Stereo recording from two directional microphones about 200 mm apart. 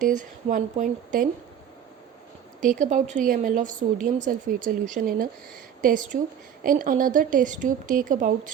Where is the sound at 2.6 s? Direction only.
40° right (ahead or behind).